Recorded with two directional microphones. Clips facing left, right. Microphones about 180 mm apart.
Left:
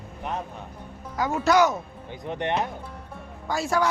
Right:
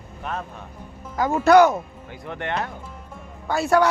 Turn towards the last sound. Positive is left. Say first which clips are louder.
# right 6 dB
turn(degrees=-65)  # may be behind; listen again after turning